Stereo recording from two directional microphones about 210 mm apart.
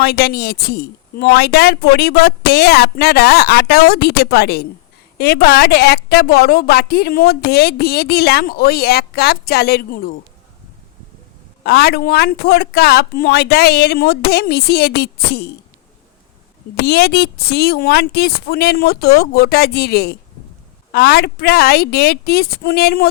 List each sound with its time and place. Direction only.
0.0 s a woman's voice: 50° left (ahead or behind)
11.6 s a woman's voice: 50° left (ahead or behind)
16.8 s a woman's voice: 50° left (ahead or behind)